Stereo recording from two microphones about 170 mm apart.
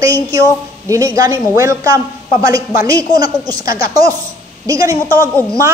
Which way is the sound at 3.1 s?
20° right (ahead or behind).